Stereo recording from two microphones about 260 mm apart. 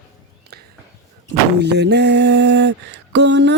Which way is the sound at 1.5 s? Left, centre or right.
Right.